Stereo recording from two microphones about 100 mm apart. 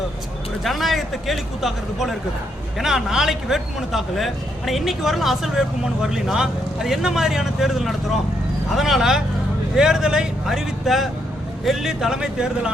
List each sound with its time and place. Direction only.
0.6 s speech: centre (ahead or behind)